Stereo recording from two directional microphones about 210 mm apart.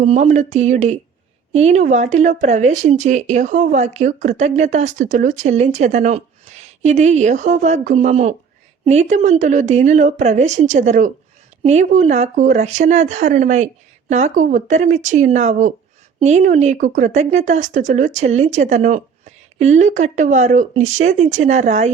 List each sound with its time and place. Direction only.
0.0 s speech: 35° right (ahead or behind)